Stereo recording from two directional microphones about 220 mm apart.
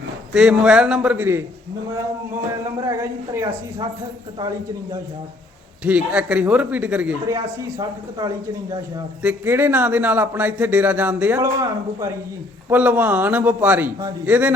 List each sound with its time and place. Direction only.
0.3 s a man's voice: 5° right (ahead or behind)
3.0 s a man's voice: 15° right (ahead or behind)
5.8 s a man's voice: 5° right (ahead or behind)
9.2 s a man's voice: 10° right (ahead or behind)